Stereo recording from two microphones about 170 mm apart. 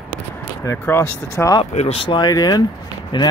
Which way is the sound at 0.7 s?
15° left (ahead or behind).